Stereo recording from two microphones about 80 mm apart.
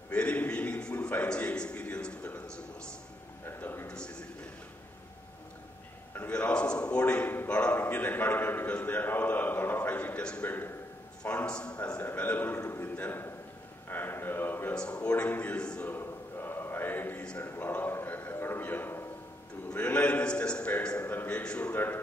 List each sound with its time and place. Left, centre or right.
0.1 s a man's voice: centre
3.4 s a man's voice: left
6.1 s a man's voice: centre
14.7 s a man's voice: centre
15.9 s choir: left
17.4 s a sound: left
19.7 s a man's voice: centre